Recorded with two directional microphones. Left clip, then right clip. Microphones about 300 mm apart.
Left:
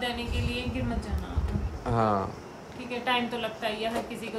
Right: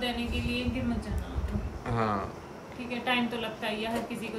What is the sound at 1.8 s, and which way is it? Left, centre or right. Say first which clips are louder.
A woman's voice: left 4 dB; centre.